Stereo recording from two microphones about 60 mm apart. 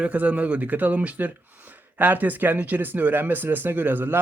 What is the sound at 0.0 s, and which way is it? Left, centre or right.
Speech, right.